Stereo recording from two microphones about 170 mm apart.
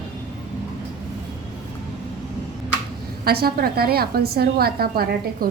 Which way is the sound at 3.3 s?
65° right (ahead or behind).